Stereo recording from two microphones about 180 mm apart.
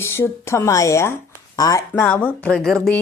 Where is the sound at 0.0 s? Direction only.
15° left (ahead or behind).